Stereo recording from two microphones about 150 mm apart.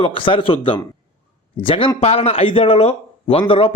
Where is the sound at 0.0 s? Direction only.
35° left (ahead or behind).